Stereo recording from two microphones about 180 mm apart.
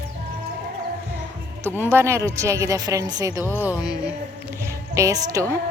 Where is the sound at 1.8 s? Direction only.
15° right (ahead or behind).